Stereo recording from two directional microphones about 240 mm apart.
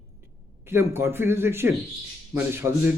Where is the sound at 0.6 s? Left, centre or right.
Centre.